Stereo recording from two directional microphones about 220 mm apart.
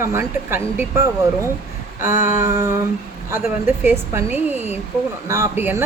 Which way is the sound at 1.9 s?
35° left (ahead or behind).